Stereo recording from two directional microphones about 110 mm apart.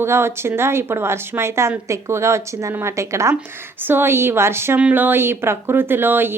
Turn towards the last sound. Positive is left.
turn(degrees=-20)  # may be behind; listen again after turning